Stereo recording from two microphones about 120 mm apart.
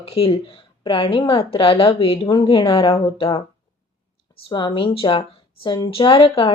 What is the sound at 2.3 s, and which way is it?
Speech, 35° left (ahead or behind).